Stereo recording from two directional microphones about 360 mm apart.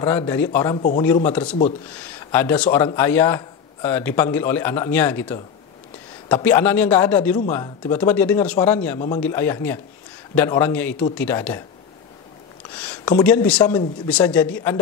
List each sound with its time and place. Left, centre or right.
0.0 s a man's voice: centre
12.8 s a sound: centre
13.2 s speech: centre